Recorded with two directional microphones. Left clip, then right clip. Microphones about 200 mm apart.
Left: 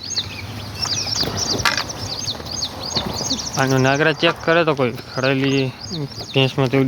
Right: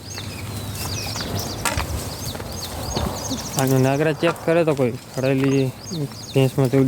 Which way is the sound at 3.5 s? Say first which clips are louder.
Left 3 dB; centre (ahead or behind).